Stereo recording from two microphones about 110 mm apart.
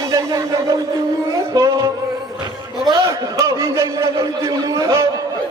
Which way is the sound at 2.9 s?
30° right (ahead or behind).